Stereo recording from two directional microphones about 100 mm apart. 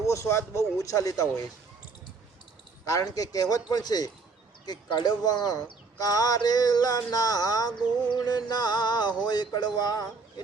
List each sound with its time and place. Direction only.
0.0 s speech: 30° left (ahead or behind)
2.8 s speech: 35° left (ahead or behind)